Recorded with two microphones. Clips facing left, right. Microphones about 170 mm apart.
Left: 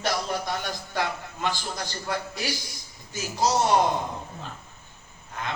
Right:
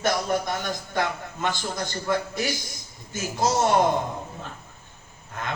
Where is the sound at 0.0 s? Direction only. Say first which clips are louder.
Right 4 dB; 50° right (ahead or behind).